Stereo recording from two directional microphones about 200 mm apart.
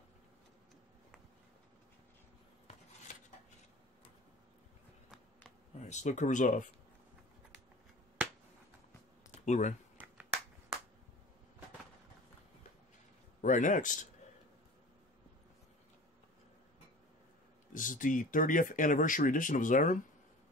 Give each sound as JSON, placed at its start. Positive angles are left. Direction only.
{"t": 5.8, "sound": "speech", "side_deg": 35}
{"t": 9.4, "sound": "speech", "side_deg": 35}
{"t": 13.4, "sound": "a man's voice", "side_deg": 40}
{"t": 17.7, "sound": "speech", "side_deg": 40}